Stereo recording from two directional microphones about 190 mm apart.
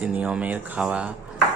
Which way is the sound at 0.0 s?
5° right (ahead or behind).